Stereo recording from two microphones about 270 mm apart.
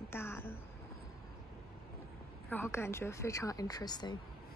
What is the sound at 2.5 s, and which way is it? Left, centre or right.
Speech, centre.